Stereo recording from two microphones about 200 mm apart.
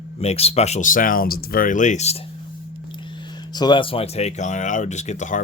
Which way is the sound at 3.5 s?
20° left (ahead or behind).